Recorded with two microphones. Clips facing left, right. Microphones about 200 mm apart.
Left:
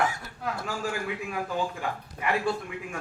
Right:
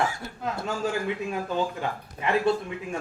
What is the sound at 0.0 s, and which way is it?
A woman's voice, 25° right (ahead or behind).